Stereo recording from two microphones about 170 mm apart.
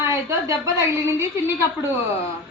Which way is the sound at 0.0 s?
15° right (ahead or behind).